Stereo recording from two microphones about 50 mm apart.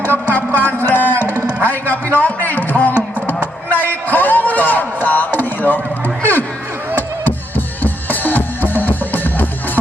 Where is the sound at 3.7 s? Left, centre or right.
Left.